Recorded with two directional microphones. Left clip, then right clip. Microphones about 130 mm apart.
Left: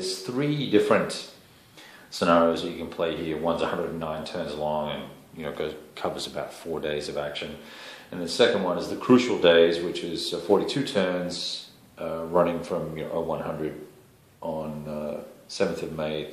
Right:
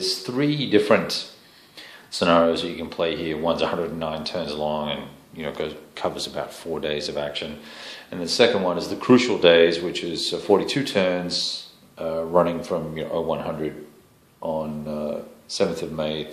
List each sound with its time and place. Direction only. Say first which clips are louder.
0.0 s speech: right 5 dB; 40° right (ahead or behind)